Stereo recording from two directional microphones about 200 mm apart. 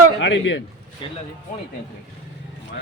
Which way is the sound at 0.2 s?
65° left (ahead or behind).